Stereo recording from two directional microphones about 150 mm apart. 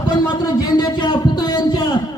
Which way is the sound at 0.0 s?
30° left (ahead or behind).